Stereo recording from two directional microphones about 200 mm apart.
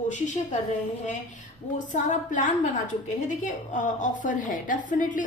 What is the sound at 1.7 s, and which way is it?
A woman's voice, 40° left (ahead or behind).